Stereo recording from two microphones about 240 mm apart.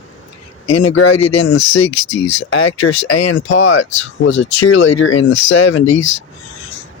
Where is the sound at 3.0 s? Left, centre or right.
Left.